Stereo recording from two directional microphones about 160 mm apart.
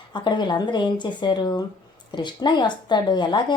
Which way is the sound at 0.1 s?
30° left (ahead or behind).